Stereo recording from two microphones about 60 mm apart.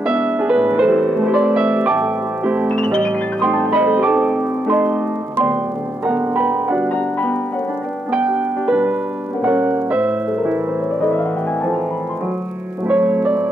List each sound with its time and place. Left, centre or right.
0.4 s music: centre
2.7 s piano: centre
3.7 s music: centre
6.0 s music: right
8.1 s music: centre
12.8 s music: right